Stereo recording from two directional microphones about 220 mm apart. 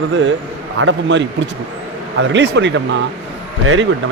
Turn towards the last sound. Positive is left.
turn(degrees=-70)  # may be behind; listen again after turning